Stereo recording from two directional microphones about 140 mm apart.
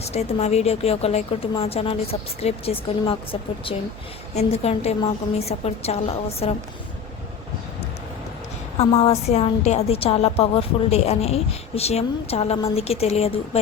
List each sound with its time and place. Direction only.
0.0 s a woman's voice: 50° left (ahead or behind)
4.4 s a woman's voice: 50° left (ahead or behind)
8.8 s a woman's voice: 45° left (ahead or behind)